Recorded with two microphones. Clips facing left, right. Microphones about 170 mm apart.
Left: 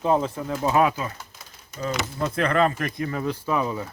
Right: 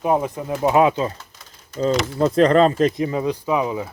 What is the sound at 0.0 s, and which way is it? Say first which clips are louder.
Speech: right 2 dB; 15° right (ahead or behind).